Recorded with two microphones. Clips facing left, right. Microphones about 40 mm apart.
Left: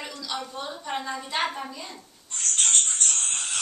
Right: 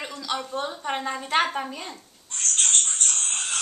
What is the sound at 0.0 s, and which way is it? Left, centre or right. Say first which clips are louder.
A woman's voice: right 3 dB; right.